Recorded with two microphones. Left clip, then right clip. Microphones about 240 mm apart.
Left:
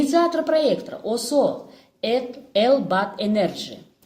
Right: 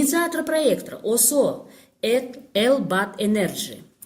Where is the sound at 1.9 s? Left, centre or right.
Right.